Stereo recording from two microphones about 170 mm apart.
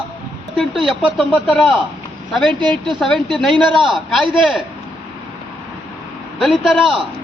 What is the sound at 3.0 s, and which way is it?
A man's voice, 5° left (ahead or behind).